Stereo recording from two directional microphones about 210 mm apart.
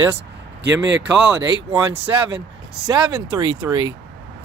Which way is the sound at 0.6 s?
60° right (ahead or behind).